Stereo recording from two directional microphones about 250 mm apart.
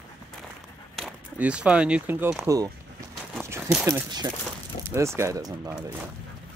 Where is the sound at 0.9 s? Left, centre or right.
Centre.